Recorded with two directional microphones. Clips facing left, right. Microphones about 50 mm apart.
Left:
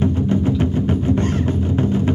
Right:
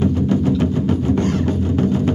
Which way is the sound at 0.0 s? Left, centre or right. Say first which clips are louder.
Right 1 dB; left.